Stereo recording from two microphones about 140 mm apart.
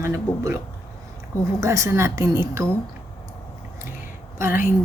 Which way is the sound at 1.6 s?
20° right (ahead or behind).